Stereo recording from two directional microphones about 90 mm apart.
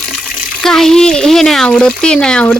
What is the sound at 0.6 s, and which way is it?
Speech, 5° left (ahead or behind).